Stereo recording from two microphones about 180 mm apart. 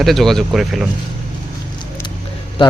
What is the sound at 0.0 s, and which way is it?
Speech, centre (ahead or behind).